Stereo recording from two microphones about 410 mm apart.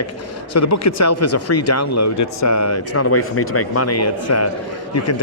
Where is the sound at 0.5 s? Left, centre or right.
Left.